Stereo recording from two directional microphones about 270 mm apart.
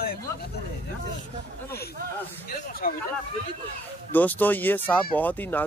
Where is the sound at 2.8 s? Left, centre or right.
Left.